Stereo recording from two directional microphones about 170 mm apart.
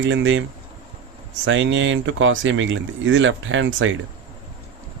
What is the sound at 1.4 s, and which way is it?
Speech, 90° right.